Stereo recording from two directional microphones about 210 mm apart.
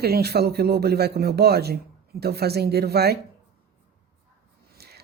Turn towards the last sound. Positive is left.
turn(degrees=-50)  # may be behind; listen again after turning